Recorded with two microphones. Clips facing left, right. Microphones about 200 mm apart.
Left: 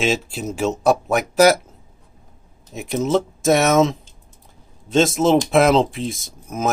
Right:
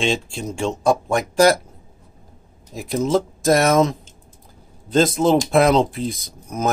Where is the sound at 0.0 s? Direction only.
5° left (ahead or behind).